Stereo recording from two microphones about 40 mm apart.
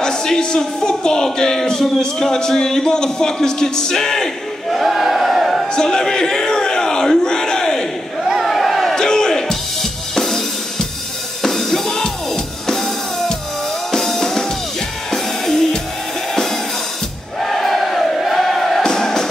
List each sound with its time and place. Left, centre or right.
0.0 s speech: centre
4.7 s a sound: centre
5.7 s crowd: centre
8.2 s battle cry: centre
8.5 s a sound: centre
8.9 s music: centre
17.4 s crowd: centre
18.8 s music: centre